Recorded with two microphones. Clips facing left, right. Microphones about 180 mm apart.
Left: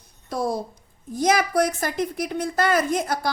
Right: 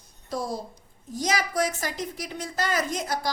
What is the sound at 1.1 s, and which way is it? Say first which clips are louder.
A woman's voice: left 6 dB; 55° left (ahead or behind).